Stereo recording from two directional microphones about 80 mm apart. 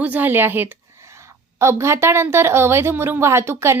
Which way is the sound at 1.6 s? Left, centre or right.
Right.